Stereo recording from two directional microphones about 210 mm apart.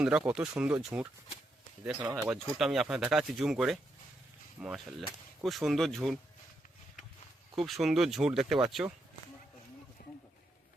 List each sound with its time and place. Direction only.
0.0 s speech: 5° right (ahead or behind)
2.3 s speech: centre (ahead or behind)
7.7 s speech: centre (ahead or behind)
10.0 s a sound: 45° left (ahead or behind)